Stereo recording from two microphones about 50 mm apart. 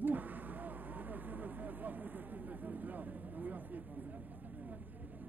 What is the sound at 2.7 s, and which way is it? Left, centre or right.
Speech, right.